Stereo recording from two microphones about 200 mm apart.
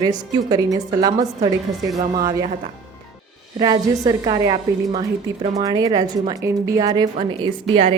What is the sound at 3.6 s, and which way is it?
A woman's voice, 20° right (ahead or behind).